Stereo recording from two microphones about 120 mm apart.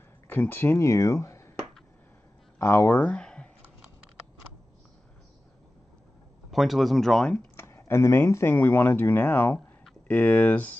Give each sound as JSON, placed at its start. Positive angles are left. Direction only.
{"t": 0.3, "sound": "speech", "side_deg": 15}
{"t": 2.6, "sound": "speech", "side_deg": 25}
{"t": 2.9, "sound": "speech", "side_deg": 10}
{"t": 6.5, "sound": "speech", "side_deg": 0}
{"t": 7.5, "sound": "speech", "side_deg": 20}